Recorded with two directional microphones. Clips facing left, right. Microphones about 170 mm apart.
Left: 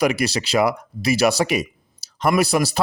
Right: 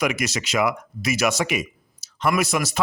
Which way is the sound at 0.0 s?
35° left (ahead or behind).